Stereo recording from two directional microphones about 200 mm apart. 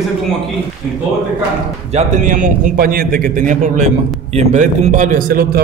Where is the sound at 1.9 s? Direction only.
40° right (ahead or behind).